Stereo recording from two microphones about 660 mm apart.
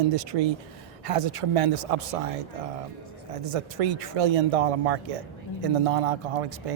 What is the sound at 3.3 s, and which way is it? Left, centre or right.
Speech, right.